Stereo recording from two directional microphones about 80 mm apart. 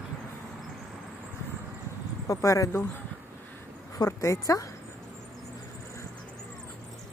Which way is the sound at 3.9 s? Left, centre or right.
Left.